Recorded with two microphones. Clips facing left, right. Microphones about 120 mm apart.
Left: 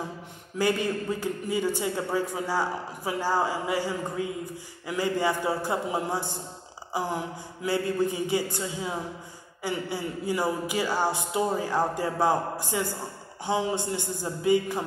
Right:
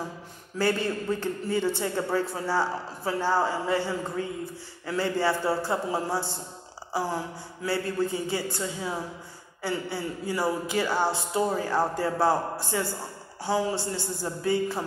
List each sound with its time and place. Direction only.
0.6 s a man's voice: 15° left (ahead or behind)